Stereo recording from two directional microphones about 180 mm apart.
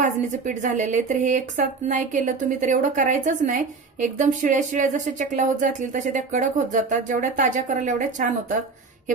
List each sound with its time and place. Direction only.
0.0 s speech: 45° right (ahead or behind)